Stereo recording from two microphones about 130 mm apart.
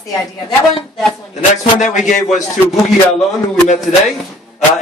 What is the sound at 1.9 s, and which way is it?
Speech, 70° left (ahead or behind).